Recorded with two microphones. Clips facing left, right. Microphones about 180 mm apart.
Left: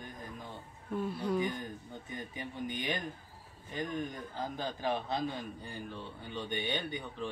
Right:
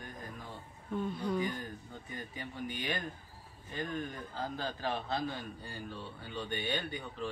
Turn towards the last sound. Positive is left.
turn(degrees=20)  # may be behind; listen again after turning